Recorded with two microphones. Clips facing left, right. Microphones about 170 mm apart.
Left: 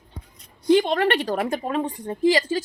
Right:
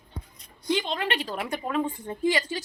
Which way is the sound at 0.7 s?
60° left (ahead or behind).